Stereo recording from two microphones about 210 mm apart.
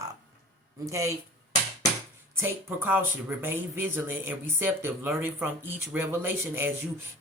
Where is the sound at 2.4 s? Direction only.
10° right (ahead or behind).